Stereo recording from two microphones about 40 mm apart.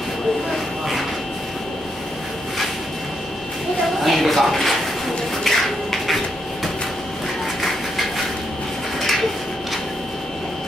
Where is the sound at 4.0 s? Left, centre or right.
Centre.